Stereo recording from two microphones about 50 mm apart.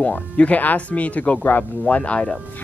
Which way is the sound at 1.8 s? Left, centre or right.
Left.